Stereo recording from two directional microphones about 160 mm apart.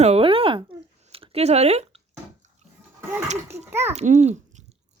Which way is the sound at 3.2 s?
45° right (ahead or behind).